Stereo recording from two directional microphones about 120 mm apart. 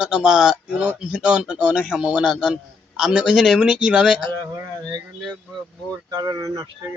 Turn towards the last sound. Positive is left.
turn(degrees=-30)  # may be behind; listen again after turning